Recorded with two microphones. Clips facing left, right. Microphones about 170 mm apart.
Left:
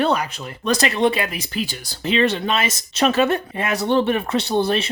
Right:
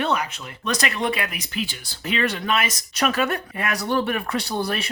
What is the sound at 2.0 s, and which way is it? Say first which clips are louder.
Speech: left 6 dB; 25° left (ahead or behind).